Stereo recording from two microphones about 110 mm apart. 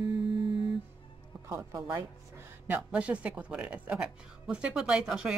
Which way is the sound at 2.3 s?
15° right (ahead or behind).